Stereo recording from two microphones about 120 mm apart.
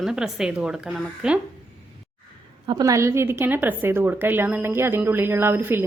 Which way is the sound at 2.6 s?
30° right (ahead or behind).